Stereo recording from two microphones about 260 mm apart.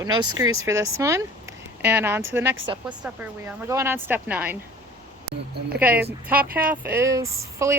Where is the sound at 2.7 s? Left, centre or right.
Centre.